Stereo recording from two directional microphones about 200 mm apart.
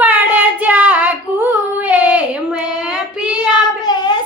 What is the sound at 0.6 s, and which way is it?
Child singing, 10° right (ahead or behind).